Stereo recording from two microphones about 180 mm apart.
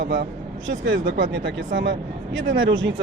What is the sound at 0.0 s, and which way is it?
Speech, 65° right (ahead or behind).